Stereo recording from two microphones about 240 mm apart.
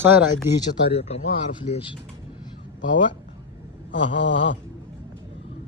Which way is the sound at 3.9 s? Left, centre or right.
Left.